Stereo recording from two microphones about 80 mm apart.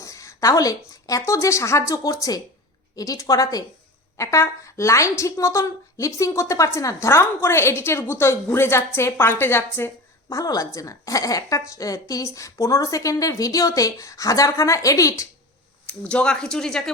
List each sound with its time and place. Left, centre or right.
0.0 s a woman's voice: left
10.2 s a woman's voice: left
15.9 s speech: centre